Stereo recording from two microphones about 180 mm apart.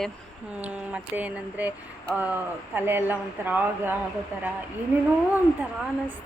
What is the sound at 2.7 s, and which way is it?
Speech, 10° right (ahead or behind).